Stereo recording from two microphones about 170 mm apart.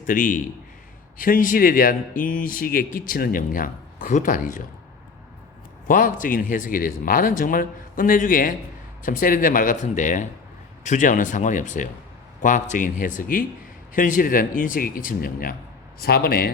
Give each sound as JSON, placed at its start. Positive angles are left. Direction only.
{"t": 0.1, "sound": "speech", "side_deg": 50}
{"t": 5.9, "sound": "speech", "side_deg": 50}